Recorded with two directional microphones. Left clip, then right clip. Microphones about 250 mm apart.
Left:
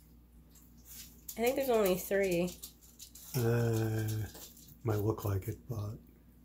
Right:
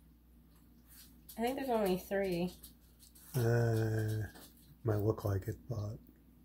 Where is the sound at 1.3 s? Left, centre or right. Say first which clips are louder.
Left 5 dB; left.